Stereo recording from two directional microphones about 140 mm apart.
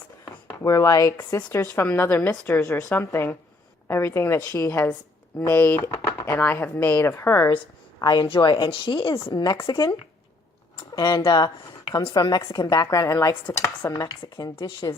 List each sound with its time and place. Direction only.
0.3 s a sound: 25° left (ahead or behind)
1.1 s a woman's voice: 20° left (ahead or behind)
3.8 s dishes: 20° left (ahead or behind)
5.4 s speech: 20° left (ahead or behind)
8.0 s speech: 30° left (ahead or behind)
9.3 s dishes: 30° left (ahead or behind)
10.8 s speech: 35° left (ahead or behind)
12.6 s dishes: 25° left (ahead or behind)